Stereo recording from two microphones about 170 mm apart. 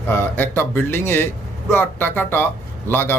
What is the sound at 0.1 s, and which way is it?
Speech, 10° left (ahead or behind).